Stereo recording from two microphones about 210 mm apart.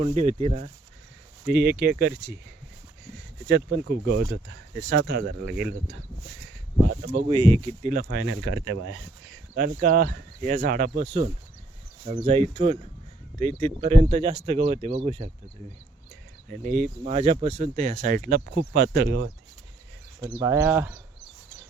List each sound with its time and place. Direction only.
0.0 s speech: 30° right (ahead or behind)
1.5 s speech: 50° right (ahead or behind)
3.5 s speech: 50° right (ahead or behind)
7.0 s speech: 40° right (ahead or behind)
7.3 s speech: 20° right (ahead or behind)
7.9 s speech: 40° right (ahead or behind)
8.2 s speech: 65° right (ahead or behind)
9.6 s speech: 40° right (ahead or behind)
16.5 s speech: 40° right (ahead or behind)
17.2 s speech: 30° right (ahead or behind); by 19.0 s 45° right (ahead or behind)
20.2 s speech: 15° right (ahead or behind)